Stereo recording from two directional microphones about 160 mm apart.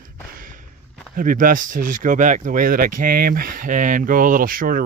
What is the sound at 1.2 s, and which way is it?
Speech, 60° right (ahead or behind).